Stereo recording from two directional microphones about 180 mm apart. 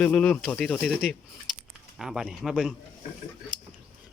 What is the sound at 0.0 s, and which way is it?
Speech, 5° left (ahead or behind).